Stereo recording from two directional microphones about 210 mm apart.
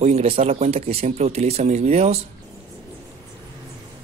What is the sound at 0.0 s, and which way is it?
Speech, 30° right (ahead or behind).